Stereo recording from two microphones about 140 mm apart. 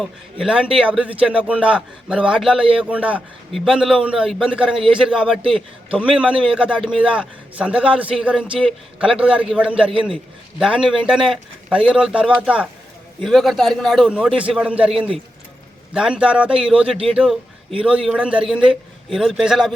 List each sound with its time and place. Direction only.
0.0 s a man's voice: 5° right (ahead or behind)
9.9 s a man's voice: 35° right (ahead or behind)
10.6 s a man's voice: 5° right (ahead or behind)